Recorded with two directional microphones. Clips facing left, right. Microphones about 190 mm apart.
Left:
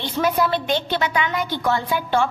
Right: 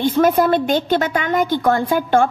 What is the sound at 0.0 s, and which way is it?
A woman's voice, 50° right (ahead or behind).